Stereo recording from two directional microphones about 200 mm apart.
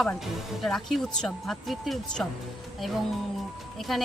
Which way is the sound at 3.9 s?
Centre (ahead or behind).